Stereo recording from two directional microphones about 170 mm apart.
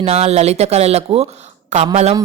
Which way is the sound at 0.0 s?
40° right (ahead or behind).